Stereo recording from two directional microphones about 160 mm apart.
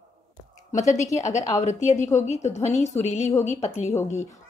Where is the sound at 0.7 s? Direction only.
50° left (ahead or behind).